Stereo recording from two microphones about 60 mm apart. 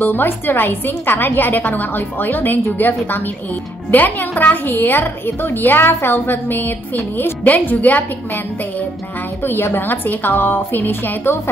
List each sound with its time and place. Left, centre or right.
0.0 s a woman's voice: left
9.4 s a woman's voice: left